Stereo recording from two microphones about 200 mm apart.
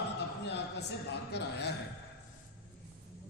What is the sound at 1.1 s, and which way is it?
Speech, 55° left (ahead or behind).